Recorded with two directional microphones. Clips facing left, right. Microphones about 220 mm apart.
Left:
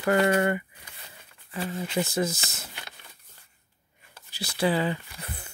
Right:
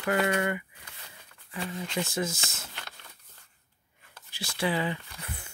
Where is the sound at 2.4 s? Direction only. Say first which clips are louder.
Left 1 dB; 5° left (ahead or behind).